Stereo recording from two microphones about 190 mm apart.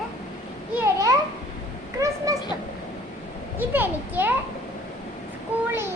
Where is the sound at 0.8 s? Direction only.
20° right (ahead or behind).